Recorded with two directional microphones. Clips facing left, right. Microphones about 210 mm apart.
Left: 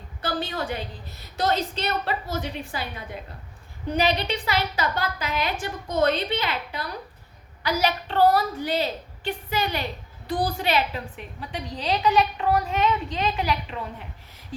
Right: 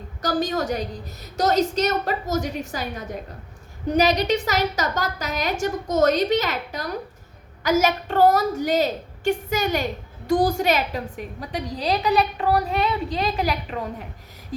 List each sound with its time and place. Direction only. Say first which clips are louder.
0.2 s a woman's voice: right 5 dB; 45° right (ahead or behind)